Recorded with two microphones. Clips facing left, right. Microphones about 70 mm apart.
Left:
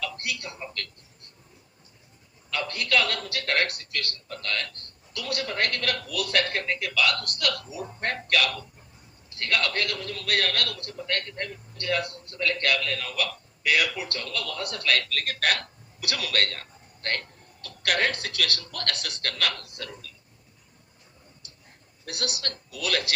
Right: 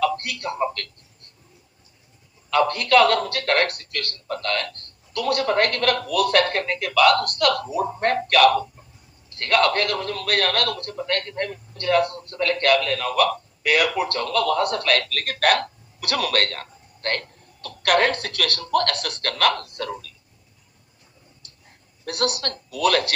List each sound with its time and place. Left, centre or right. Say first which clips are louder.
0.0 s speech: right 10 dB; right
2.5 s a man's voice: right 9 dB; right
22.0 s a man's voice: right 8 dB; right